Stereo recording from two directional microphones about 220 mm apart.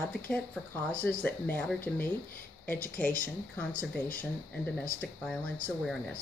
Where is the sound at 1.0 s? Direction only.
5° left (ahead or behind).